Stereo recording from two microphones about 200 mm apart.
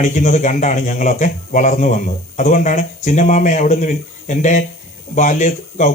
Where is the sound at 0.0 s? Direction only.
35° left (ahead or behind).